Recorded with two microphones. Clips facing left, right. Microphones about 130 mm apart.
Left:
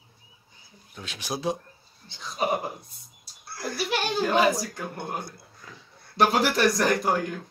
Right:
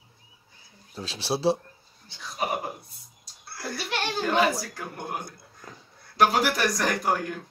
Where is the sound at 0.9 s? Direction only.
30° right (ahead or behind).